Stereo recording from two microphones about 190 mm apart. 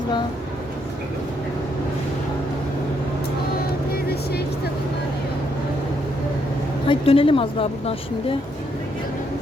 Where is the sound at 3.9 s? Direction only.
55° left (ahead or behind).